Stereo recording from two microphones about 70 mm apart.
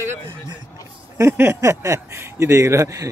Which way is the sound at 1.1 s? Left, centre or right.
Right.